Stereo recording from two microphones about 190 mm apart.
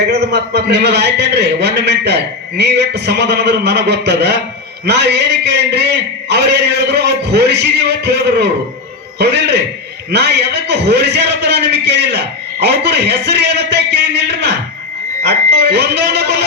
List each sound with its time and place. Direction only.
0.1 s a man's voice: 60° right (ahead or behind)